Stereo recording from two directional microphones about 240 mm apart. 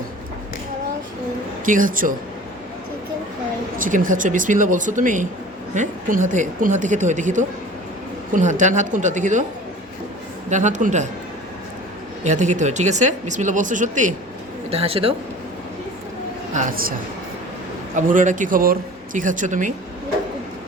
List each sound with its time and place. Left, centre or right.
1.6 s speech: right
3.8 s speech: right
10.5 s speech: right
12.2 s speech: right
16.6 s speech: right
17.9 s speech: right